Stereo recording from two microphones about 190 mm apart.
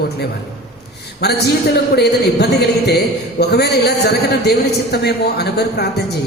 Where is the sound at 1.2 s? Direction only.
60° left (ahead or behind).